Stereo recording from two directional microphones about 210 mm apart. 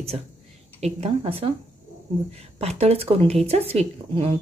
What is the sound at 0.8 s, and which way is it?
A woman's voice, 25° right (ahead or behind).